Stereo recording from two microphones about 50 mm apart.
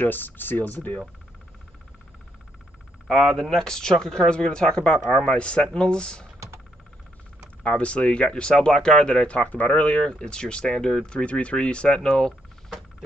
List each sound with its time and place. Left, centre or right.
0.0 s speech: left
3.1 s speech: centre
7.6 s speech: left